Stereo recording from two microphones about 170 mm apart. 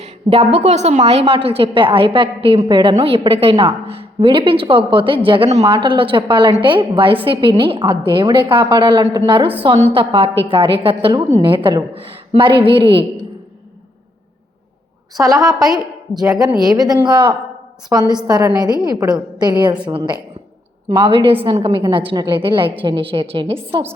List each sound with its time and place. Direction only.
0.0 s a woman's voice: 35° right (ahead or behind)
15.2 s a woman's voice: 20° right (ahead or behind)